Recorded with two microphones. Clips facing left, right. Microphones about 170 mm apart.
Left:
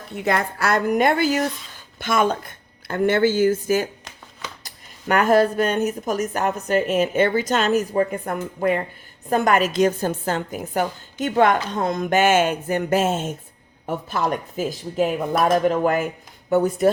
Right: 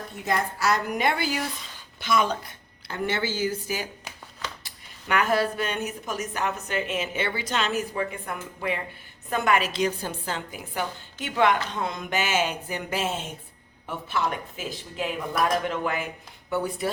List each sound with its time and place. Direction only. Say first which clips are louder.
0.3 s speech: left 4 dB; 65° left (ahead or behind); by 16.9 s 45° left (ahead or behind)